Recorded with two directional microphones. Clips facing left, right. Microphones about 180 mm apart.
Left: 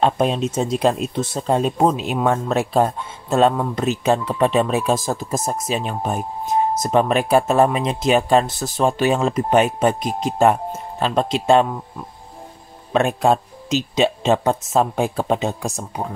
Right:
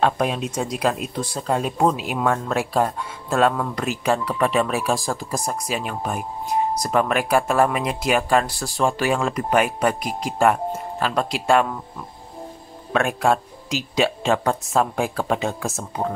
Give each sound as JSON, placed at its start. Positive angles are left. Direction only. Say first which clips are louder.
{"t": 0.0, "sound": "speech", "louder": "left 3 dB", "side_deg": 25}
{"t": 12.9, "sound": "speech", "louder": "left 3 dB", "side_deg": 20}